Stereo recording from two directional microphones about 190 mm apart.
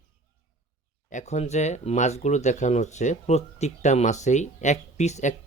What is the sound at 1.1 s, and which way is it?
Speech, 35° left (ahead or behind).